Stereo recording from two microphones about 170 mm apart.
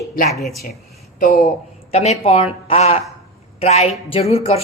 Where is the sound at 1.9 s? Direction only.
40° left (ahead or behind).